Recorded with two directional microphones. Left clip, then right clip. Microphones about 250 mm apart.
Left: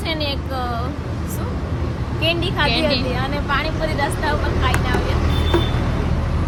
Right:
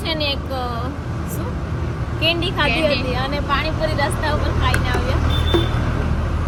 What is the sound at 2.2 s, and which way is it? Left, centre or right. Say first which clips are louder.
Speech: right 1 dB; centre.